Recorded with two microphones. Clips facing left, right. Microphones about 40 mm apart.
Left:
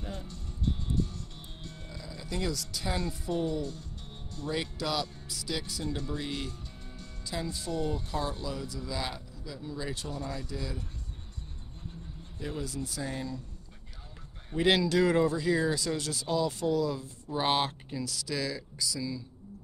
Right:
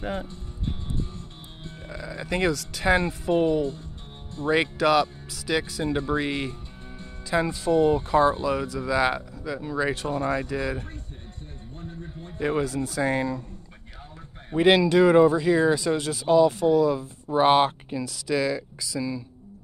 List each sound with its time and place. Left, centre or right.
0.0 s speech: right
0.3 s music: right
1.9 s speech: right
4.5 s speech: right
5.0 s speech: right
12.0 s speech: right
14.5 s speech: right